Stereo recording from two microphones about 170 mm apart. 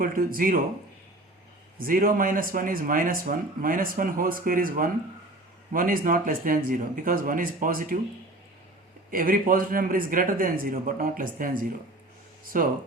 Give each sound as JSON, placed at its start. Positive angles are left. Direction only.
{"t": 0.0, "sound": "speech", "side_deg": -60}
{"t": 1.8, "sound": "speech", "side_deg": -55}
{"t": 9.0, "sound": "speech", "side_deg": -55}
{"t": 12.5, "sound": "speech", "side_deg": -55}